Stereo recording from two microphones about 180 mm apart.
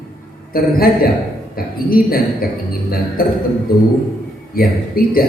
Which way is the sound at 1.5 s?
55° left (ahead or behind).